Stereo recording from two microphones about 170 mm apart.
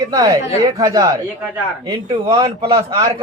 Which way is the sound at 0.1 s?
20° right (ahead or behind).